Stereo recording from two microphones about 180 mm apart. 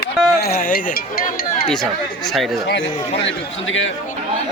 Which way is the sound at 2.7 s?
85° left.